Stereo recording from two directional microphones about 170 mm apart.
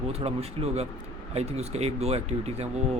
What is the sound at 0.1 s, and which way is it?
Speech, 35° right (ahead or behind).